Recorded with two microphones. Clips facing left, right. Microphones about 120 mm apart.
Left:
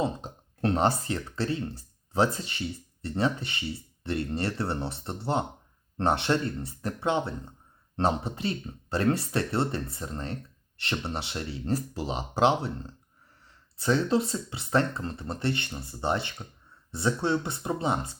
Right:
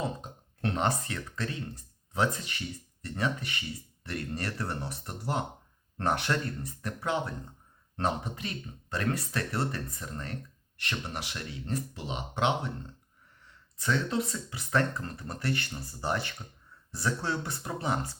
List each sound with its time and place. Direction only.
0.0 s speech: 35° left (ahead or behind)